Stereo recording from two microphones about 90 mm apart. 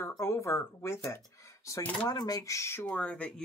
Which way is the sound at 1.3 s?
35° left (ahead or behind).